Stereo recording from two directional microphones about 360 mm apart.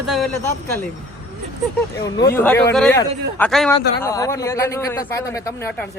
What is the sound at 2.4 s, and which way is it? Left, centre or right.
A man's voice, centre.